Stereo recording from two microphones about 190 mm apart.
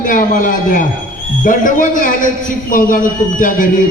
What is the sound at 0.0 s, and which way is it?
A man's voice, 45° left (ahead or behind).